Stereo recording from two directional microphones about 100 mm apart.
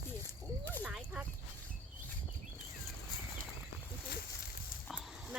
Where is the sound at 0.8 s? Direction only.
15° right (ahead or behind).